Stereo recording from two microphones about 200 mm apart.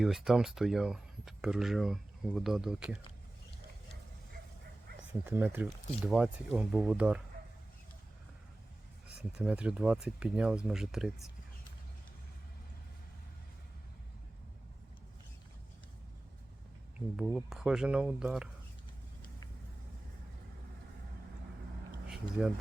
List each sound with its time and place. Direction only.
0.0 s speech: centre (ahead or behind)
5.2 s speech: 10° right (ahead or behind)
9.4 s speech: 5° right (ahead or behind)
17.2 s speech: centre (ahead or behind)
22.0 s a sound: 5° right (ahead or behind)